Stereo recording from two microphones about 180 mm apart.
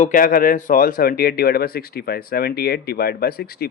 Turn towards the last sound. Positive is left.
turn(degrees=60)  # may be behind; listen again after turning